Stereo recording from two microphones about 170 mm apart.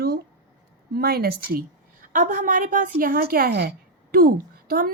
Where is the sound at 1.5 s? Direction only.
50° right (ahead or behind).